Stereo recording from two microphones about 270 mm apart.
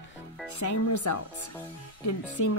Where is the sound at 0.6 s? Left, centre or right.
Left.